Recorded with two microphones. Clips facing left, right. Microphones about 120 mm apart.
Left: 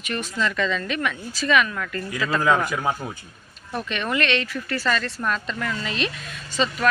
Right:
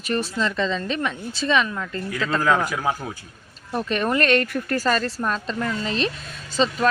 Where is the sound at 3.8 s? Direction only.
40° right (ahead or behind).